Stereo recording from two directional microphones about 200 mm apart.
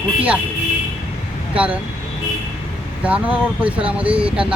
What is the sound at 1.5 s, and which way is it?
Speech, 5° right (ahead or behind).